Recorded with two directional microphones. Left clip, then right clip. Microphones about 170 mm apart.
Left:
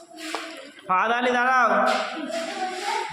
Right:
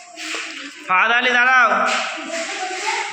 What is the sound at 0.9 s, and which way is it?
Speech, 15° left (ahead or behind).